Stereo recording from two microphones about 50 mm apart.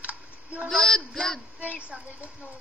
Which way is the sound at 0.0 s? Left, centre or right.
Right.